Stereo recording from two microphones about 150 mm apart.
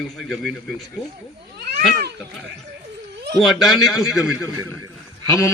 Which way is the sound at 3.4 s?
Centre (ahead or behind).